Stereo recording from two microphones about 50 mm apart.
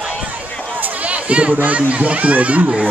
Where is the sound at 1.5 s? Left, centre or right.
Right.